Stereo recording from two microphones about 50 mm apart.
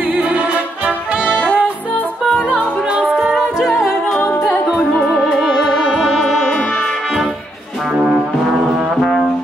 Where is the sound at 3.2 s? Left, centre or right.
Centre.